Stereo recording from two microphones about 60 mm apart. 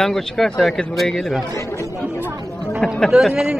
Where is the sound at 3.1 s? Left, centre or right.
Centre.